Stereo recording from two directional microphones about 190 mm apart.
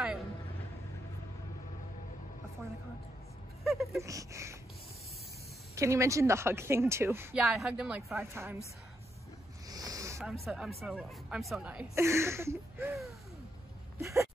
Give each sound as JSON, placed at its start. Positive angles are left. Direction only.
{"t": 3.6, "sound": "a sound", "side_deg": 0}
{"t": 4.0, "sound": "speech", "side_deg": -15}
{"t": 5.8, "sound": "speech", "side_deg": -15}
{"t": 7.4, "sound": "speech", "side_deg": 0}
{"t": 9.7, "sound": "a sound", "side_deg": -20}
{"t": 10.4, "sound": "speech", "side_deg": 0}
{"t": 14.0, "sound": "speech", "side_deg": -15}